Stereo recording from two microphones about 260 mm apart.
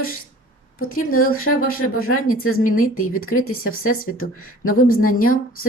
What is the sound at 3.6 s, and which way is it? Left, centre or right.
Speech, left.